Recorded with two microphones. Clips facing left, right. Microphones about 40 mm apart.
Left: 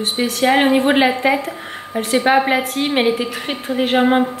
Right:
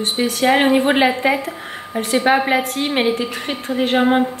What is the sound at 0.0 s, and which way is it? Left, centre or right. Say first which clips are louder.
Speech: even; centre.